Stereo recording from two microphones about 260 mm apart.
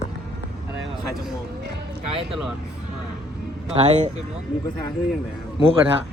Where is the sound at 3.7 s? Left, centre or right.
Right.